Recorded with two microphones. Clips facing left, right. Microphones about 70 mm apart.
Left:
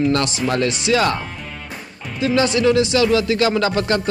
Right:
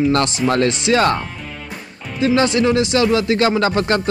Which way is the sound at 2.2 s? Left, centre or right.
Right.